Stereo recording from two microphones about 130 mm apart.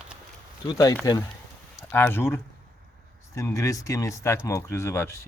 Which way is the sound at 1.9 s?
15° left (ahead or behind).